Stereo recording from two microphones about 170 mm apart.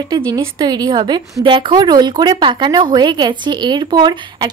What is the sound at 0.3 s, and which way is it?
Speech, 20° right (ahead or behind).